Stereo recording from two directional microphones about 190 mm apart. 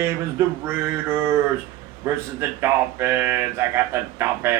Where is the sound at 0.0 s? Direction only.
10° right (ahead or behind).